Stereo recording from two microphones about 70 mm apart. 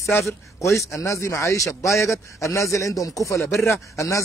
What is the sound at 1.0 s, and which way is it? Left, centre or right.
Speech, left.